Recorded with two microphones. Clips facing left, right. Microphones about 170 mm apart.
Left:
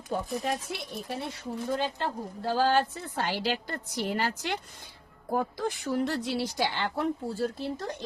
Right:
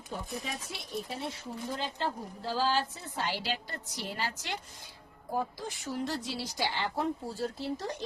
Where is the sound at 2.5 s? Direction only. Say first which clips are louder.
Left 5 dB; 55° left (ahead or behind).